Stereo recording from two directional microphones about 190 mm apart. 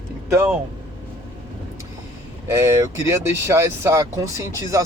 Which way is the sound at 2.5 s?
15° right (ahead or behind).